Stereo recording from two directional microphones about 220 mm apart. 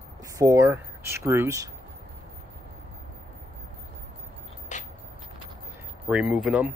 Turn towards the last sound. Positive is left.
turn(degrees=-5)  # may be behind; listen again after turning